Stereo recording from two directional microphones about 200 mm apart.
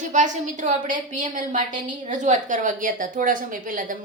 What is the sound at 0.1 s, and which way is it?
A woman's voice, 40° right (ahead or behind).